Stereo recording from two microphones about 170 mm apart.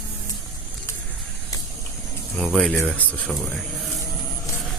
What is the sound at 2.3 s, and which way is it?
Speech, centre (ahead or behind).